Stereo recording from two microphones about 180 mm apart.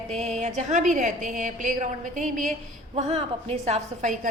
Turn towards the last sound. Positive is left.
turn(degrees=-40)  # may be behind; listen again after turning